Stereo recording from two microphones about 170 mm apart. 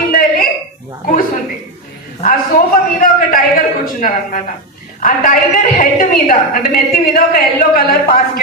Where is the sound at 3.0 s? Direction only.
55° left (ahead or behind).